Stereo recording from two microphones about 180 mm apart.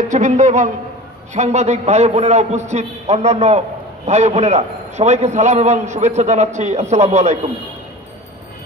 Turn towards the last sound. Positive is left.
turn(degrees=-40)  # may be behind; listen again after turning